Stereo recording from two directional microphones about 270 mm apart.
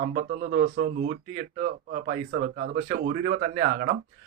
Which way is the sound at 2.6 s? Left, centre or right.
Right.